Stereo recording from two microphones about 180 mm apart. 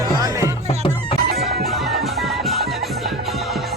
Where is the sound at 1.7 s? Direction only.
Centre (ahead or behind).